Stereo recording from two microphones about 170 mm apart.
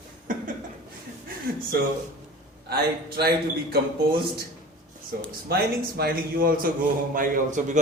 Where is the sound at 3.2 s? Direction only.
65° right (ahead or behind).